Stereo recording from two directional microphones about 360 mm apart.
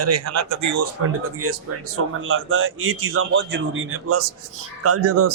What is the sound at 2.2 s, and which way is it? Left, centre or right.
Speech, right.